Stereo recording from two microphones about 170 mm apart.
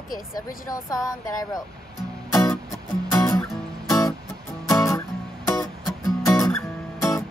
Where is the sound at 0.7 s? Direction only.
20° left (ahead or behind).